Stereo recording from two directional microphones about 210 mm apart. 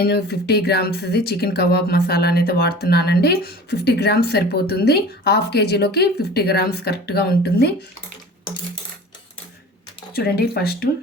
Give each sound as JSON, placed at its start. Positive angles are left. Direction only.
{"t": 0.0, "sound": "speech", "side_deg": 50}
{"t": 10.2, "sound": "speech", "side_deg": 50}